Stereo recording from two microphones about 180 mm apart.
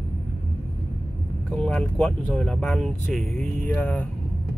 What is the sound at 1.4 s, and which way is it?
Speech, 5° left (ahead or behind).